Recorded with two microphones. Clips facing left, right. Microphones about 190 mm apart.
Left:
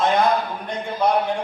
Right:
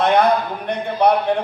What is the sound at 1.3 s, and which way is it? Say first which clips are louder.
Speech: right 5 dB; 65° right (ahead or behind).